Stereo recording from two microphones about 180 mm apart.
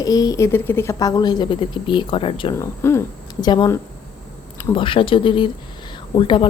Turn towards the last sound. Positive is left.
turn(degrees=25)  # may be behind; listen again after turning